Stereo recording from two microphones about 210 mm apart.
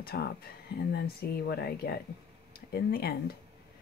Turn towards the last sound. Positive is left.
turn(degrees=50)  # may be behind; listen again after turning